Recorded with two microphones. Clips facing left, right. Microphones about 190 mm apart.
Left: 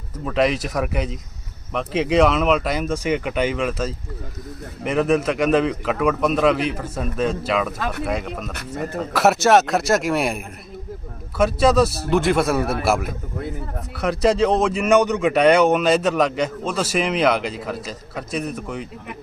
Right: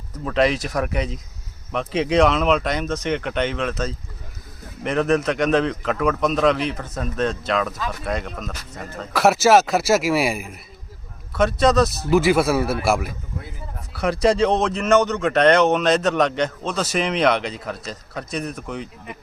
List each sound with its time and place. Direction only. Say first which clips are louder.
0.3 s a man's voice: even; centre (ahead or behind)
7.8 s speech: left 3 dB; 65° left (ahead or behind)
8.0 s a man's voice: left 2 dB; 5° left (ahead or behind)